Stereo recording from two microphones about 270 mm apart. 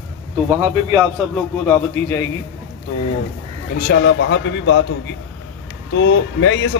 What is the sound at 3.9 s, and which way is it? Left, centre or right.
Speech, left.